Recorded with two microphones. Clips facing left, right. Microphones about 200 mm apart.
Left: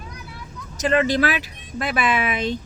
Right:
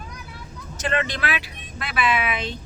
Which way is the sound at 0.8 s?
35° left (ahead or behind).